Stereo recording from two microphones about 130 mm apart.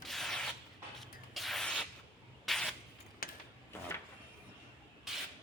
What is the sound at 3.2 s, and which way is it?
Sewing machine, 90° left.